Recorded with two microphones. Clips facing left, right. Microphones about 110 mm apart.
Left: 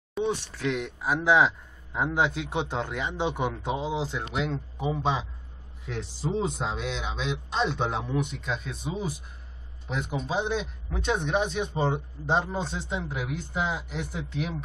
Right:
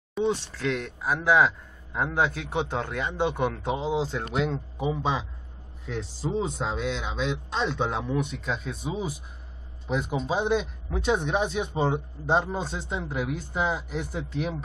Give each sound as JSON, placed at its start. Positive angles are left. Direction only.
{"t": 0.2, "sound": "a sound", "side_deg": 0}
{"t": 0.7, "sound": "a man's voice", "side_deg": 15}
{"t": 8.1, "sound": "a man's voice", "side_deg": 0}